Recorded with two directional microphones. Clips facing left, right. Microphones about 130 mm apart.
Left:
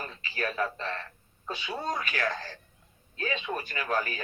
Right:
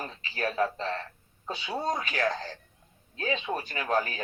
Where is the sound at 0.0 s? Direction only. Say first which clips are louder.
Right 2 dB; 30° right (ahead or behind).